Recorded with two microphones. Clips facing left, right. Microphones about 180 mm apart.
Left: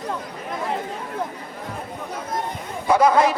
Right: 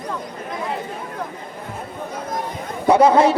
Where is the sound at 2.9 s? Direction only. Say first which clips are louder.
Right 3 dB; 25° right (ahead or behind).